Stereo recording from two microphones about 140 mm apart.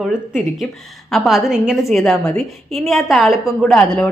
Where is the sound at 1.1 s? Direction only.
Centre (ahead or behind).